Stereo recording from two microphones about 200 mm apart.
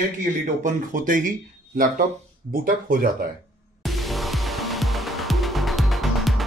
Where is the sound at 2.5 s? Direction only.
45° right (ahead or behind).